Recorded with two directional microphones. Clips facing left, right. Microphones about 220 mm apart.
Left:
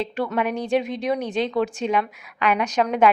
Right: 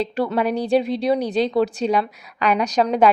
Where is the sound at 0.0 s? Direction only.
35° right (ahead or behind).